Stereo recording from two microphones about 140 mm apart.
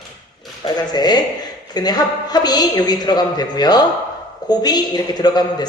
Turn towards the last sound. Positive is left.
turn(degrees=30)  # may be behind; listen again after turning